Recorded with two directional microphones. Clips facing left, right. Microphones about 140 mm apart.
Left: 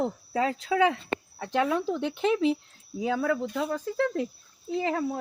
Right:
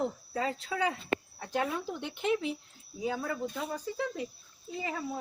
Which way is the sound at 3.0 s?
90° left.